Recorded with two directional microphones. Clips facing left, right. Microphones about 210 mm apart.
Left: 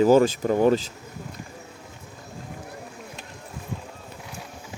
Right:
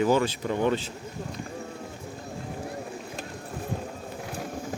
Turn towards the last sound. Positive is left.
turn(degrees=-45)  # may be behind; listen again after turning